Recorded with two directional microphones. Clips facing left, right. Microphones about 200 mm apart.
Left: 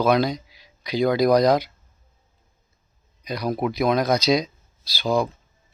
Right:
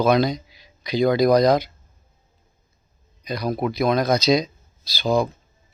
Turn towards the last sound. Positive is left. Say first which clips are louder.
# right 2 dB
turn(degrees=10)  # may be behind; listen again after turning